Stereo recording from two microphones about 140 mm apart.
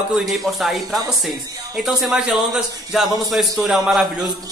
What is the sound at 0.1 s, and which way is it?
Speech, centre (ahead or behind).